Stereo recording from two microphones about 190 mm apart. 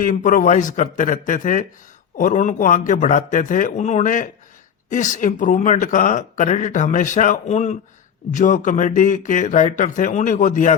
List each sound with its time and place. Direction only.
0.0 s speech: 40° left (ahead or behind)